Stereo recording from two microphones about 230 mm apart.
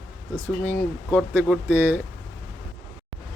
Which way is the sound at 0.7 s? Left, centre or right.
Centre.